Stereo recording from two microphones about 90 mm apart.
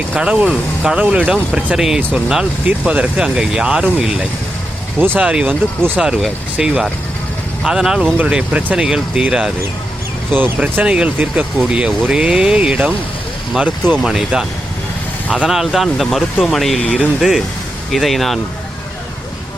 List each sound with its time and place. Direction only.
0.1 s speech: 15° right (ahead or behind)
4.9 s speech: 20° right (ahead or behind)
5.2 s speech: 10° right (ahead or behind)
10.3 s speech: 20° right (ahead or behind)
14.0 s speech: 5° right (ahead or behind)
15.3 s speech: 5° right (ahead or behind)